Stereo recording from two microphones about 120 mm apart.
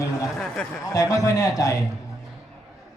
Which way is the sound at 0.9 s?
25° left (ahead or behind).